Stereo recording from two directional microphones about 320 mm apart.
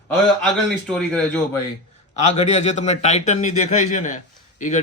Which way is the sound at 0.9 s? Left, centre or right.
Centre.